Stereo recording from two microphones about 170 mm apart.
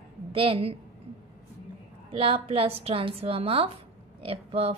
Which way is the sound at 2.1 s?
35° right (ahead or behind).